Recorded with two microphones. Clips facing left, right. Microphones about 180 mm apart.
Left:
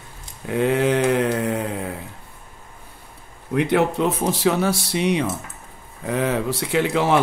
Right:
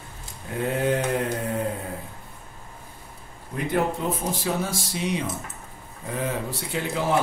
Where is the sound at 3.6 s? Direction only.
75° left (ahead or behind).